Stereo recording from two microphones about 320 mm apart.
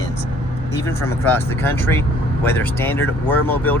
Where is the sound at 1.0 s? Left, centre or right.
Centre.